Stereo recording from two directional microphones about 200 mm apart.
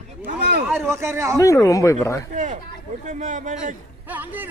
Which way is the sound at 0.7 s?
15° right (ahead or behind).